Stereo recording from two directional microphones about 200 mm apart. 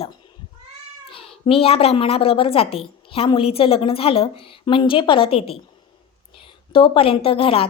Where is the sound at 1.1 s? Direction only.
25° left (ahead or behind).